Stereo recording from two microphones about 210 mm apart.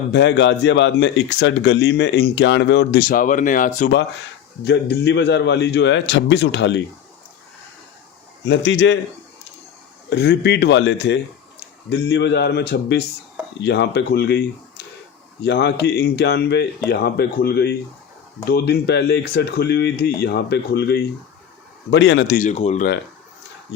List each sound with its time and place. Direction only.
0.1 s speech: 55° left (ahead or behind); by 3.9 s 40° left (ahead or behind)
4.6 s speech: 55° left (ahead or behind)
8.4 s speech: 55° left (ahead or behind)
10.1 s speech: 55° left (ahead or behind)
22.4 s speech: 30° left (ahead or behind)